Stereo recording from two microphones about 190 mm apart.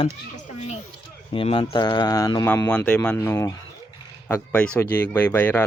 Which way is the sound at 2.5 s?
5° left (ahead or behind).